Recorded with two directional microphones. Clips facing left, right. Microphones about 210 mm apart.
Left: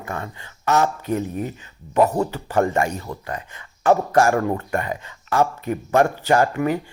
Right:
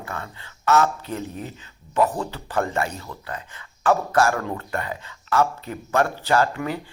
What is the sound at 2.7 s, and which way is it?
Speech, 15° left (ahead or behind).